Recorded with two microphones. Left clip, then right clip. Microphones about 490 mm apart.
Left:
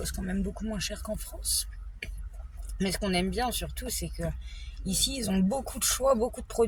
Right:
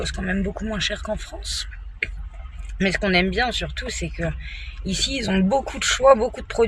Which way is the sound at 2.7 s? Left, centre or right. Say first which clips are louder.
Right 10 dB; left.